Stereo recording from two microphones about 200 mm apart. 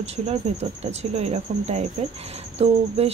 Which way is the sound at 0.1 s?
30° right (ahead or behind).